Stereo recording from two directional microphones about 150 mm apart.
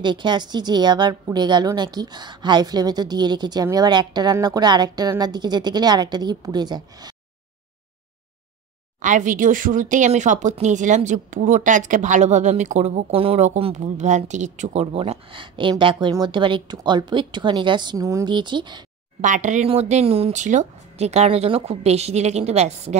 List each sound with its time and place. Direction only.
0.0 s a woman's voice: 30° right (ahead or behind)
9.0 s speech: 55° right (ahead or behind); by 18.8 s 30° right (ahead or behind)
19.2 s speech: 55° right (ahead or behind)